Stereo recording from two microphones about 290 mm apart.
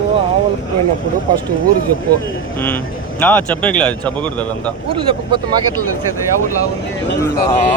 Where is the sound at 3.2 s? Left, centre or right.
Centre.